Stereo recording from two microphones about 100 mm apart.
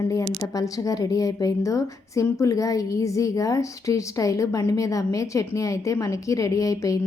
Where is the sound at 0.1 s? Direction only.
35° left (ahead or behind).